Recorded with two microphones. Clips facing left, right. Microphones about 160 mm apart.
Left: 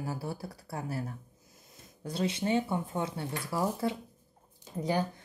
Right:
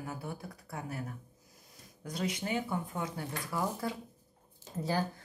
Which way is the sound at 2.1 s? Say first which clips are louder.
Left 5 dB; 30° left (ahead or behind).